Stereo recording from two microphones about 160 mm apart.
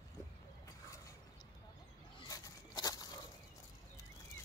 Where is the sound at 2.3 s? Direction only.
25° left (ahead or behind).